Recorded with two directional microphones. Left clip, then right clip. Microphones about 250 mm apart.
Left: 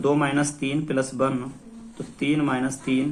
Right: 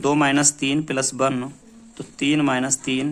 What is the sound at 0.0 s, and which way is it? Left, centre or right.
Speech, right.